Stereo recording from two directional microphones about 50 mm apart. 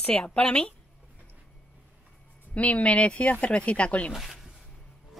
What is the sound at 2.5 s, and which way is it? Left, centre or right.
Speech, left.